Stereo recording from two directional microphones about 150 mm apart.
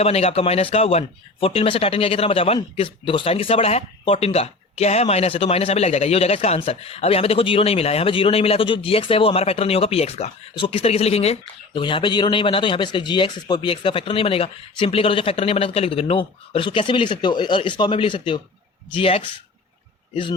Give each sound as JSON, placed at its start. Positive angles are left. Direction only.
{"t": 0.0, "sound": "speech", "side_deg": 45}